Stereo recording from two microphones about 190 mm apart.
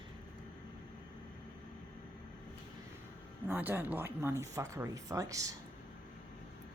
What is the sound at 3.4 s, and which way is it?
Speech, 10° right (ahead or behind).